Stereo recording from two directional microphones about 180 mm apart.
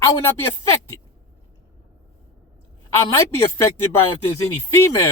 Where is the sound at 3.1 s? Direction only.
15° left (ahead or behind).